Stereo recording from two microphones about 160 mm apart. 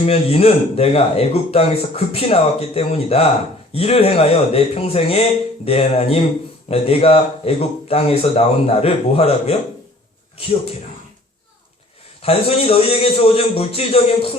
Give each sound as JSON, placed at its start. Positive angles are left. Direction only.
{"t": 0.0, "sound": "speech", "side_deg": 40}
{"t": 12.2, "sound": "speech", "side_deg": 35}